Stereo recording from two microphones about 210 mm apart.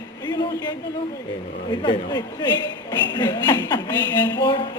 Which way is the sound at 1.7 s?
20° left (ahead or behind).